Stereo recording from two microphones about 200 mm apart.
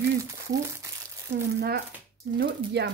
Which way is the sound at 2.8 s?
55° right (ahead or behind).